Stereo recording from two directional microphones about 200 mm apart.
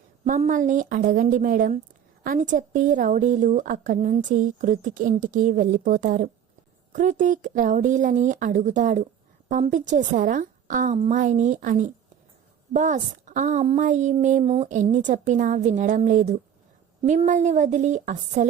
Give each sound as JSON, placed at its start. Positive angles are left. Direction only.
{"t": 0.3, "sound": "a woman's voice", "side_deg": -40}